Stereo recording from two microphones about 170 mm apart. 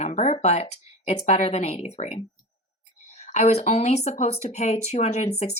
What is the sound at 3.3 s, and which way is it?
Speech, 40° left (ahead or behind).